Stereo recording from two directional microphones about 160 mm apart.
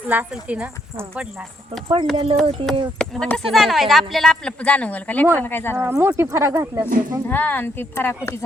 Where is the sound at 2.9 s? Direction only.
5° left (ahead or behind).